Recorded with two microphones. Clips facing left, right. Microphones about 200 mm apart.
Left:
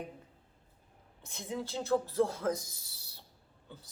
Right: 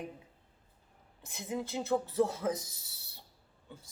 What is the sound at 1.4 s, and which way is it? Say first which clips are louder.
Speech: right 1 dB; 5° right (ahead or behind).